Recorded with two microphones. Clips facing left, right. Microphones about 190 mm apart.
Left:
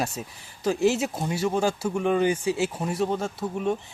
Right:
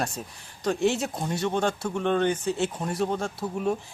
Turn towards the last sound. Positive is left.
turn(degrees=0)  # may be behind; listen again after turning